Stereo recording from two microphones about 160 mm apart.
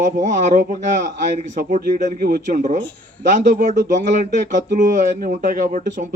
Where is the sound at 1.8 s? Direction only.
65° right (ahead or behind).